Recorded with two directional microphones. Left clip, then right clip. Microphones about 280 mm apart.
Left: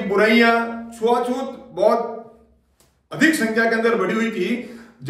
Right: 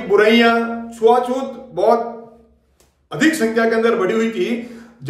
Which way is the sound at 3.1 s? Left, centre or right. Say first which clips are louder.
Right 1 dB; centre.